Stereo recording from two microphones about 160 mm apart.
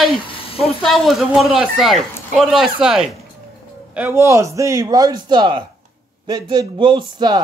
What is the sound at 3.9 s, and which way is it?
Speech, 15° right (ahead or behind).